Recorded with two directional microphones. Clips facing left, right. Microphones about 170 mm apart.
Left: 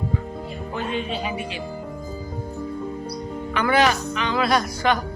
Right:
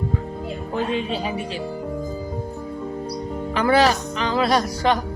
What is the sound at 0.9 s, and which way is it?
Speech, 35° right (ahead or behind).